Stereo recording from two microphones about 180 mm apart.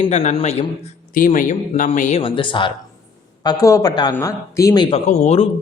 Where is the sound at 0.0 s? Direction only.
40° left (ahead or behind).